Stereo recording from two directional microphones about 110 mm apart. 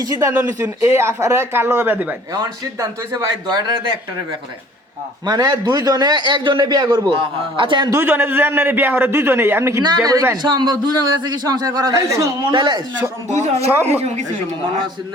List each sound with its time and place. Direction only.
0.0 s a man's voice: 30° right (ahead or behind)
0.3 s a man's voice: 20° right (ahead or behind)
2.3 s a man's voice: 30° right (ahead or behind)
5.2 s a man's voice: 35° right (ahead or behind)
7.9 s a man's voice: 20° right (ahead or behind)
9.8 s a man's voice: 40° right (ahead or behind)
12.5 s a man's voice: 40° right (ahead or behind)
13.4 s speech: 80° right